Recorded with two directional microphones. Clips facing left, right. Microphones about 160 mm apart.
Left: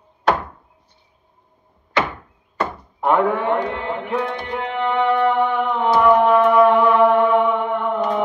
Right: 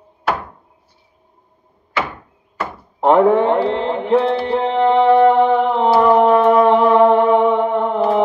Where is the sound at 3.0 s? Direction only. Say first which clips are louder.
Right 6 dB; 25° right (ahead or behind).